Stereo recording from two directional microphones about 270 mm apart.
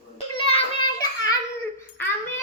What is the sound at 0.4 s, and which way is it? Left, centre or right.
Child singing, left.